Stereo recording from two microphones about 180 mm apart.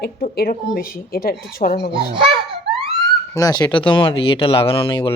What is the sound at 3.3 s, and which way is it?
Speech, 20° left (ahead or behind).